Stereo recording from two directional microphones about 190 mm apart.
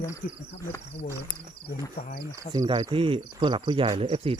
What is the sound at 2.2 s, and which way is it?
Insect, 20° right (ahead or behind).